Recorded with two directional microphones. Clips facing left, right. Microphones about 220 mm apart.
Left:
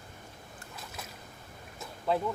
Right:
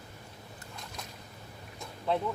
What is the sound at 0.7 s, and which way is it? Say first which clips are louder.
Boat: left 1 dB; 5° left (ahead or behind).